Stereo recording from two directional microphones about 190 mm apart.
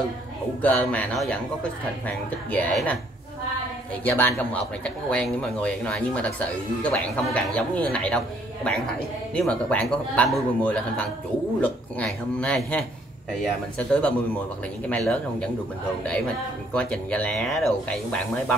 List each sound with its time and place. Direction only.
0.6 s a man's voice: 10° left (ahead or behind)
9.3 s a man's voice: 5° left (ahead or behind)
16.7 s speech: 5° left (ahead or behind)